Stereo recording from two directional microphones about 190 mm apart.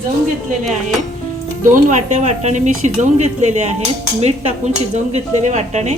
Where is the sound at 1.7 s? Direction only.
40° right (ahead or behind).